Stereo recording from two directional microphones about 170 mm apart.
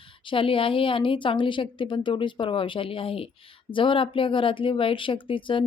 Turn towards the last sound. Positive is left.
turn(degrees=30)  # may be behind; listen again after turning